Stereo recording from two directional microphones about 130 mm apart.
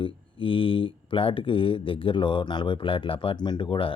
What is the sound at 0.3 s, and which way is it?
Speech, 40° left (ahead or behind).